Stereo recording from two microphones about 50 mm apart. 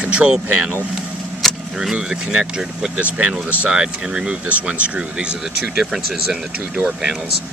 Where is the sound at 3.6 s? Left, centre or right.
Centre.